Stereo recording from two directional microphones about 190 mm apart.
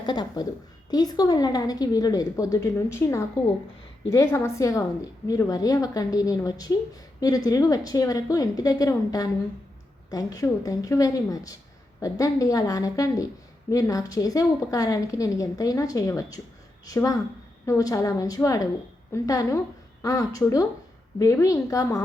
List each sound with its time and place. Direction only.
0.0 s a woman's voice: 25° left (ahead or behind)